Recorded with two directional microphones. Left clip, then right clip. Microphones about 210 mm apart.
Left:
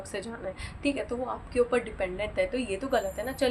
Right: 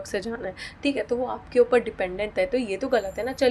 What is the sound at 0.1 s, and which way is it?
A woman's voice, 35° right (ahead or behind).